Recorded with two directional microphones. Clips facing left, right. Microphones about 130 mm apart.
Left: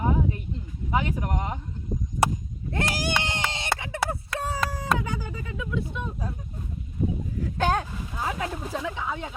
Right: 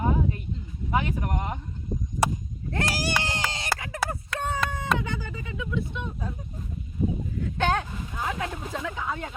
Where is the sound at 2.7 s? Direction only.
20° left (ahead or behind); by 6.0 s 40° left (ahead or behind).